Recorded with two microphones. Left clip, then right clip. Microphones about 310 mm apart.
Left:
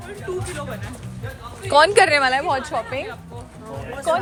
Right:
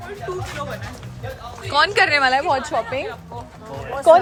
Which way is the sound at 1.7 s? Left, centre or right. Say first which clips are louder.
Left 2 dB; centre.